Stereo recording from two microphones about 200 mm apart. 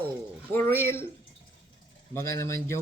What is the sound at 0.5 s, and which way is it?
Speech, 10° left (ahead or behind).